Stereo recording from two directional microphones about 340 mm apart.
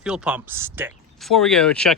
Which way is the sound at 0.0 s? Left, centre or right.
Centre.